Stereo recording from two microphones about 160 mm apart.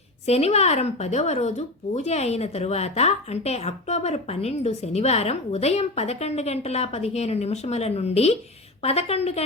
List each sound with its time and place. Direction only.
0.3 s speech: 40° left (ahead or behind)